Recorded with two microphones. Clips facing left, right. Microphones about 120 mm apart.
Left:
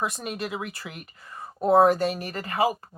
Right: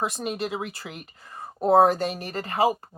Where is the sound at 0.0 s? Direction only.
25° right (ahead or behind).